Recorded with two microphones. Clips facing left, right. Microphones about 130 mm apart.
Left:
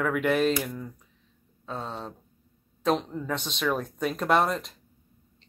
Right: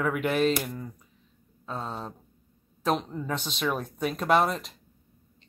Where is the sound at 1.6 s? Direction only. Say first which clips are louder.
Even; 40° right (ahead or behind).